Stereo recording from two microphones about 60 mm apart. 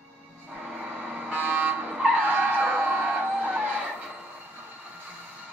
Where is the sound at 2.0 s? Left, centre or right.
Right.